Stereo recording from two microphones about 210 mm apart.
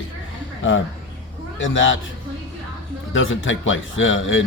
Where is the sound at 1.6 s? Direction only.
65° left (ahead or behind).